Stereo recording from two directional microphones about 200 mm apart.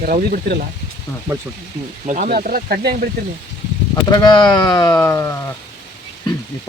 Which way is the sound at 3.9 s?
20° left (ahead or behind).